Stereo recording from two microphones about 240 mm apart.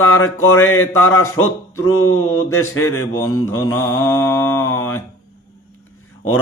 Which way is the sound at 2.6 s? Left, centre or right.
Centre.